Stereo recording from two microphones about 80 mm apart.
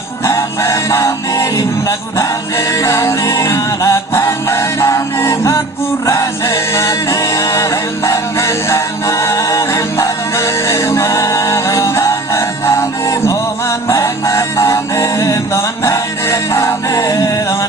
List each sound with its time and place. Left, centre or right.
0.3 s music: left